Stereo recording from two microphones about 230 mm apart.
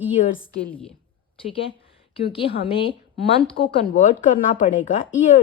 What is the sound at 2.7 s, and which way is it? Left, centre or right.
A woman's voice, left.